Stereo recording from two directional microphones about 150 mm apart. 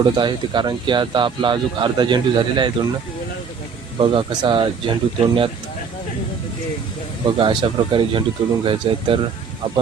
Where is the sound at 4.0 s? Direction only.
35° right (ahead or behind).